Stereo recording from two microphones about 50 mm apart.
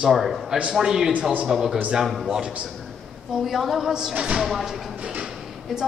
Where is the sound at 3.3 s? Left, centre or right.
Centre.